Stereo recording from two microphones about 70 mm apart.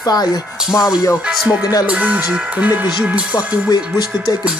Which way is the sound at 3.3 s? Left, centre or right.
Left.